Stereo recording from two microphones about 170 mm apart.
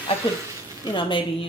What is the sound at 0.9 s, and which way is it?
Speech, 30° left (ahead or behind).